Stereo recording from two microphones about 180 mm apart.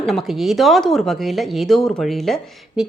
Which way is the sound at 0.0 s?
Centre (ahead or behind).